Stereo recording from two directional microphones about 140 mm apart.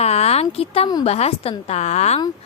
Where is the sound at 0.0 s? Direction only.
50° left (ahead or behind).